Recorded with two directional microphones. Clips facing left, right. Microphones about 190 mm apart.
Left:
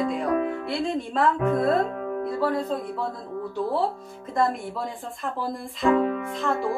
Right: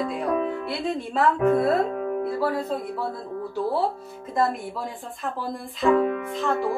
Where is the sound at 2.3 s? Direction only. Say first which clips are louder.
Left 3 dB; 5° right (ahead or behind).